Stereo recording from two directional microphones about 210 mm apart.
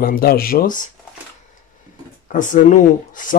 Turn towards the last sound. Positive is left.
turn(degrees=40)  # may be behind; listen again after turning